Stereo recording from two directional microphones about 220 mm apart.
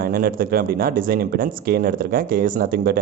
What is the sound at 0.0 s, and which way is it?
Speech, 40° right (ahead or behind).